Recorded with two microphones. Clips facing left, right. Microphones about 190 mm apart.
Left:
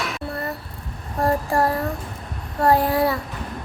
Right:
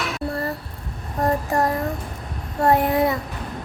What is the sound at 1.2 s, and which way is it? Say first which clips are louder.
Child singing: left 1 dB; 20° right (ahead or behind).